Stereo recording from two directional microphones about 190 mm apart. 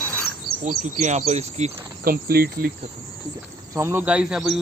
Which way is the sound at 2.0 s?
50° right (ahead or behind).